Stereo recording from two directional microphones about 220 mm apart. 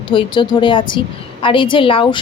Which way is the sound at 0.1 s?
20° left (ahead or behind).